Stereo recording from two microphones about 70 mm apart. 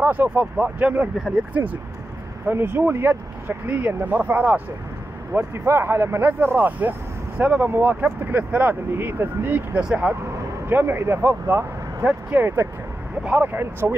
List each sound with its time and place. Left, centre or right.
0.0 s speech: right
5.3 s a man's voice: right
9.8 s speech: centre
10.7 s speech: right